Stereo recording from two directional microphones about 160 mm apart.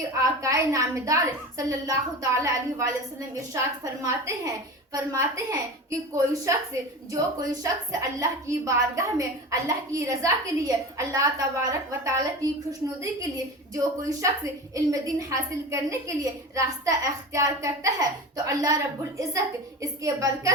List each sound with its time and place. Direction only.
0.2 s a woman's voice: 20° right (ahead or behind)
13.7 s a woman's voice: 20° right (ahead or behind)